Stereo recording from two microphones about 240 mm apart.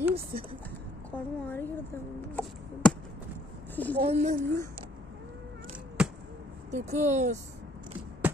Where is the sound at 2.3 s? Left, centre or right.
Centre.